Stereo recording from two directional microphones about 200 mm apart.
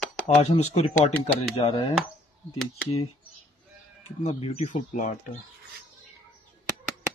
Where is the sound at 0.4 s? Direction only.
30° left (ahead or behind).